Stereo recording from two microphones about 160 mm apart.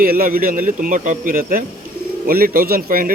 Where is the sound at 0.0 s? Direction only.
65° right (ahead or behind).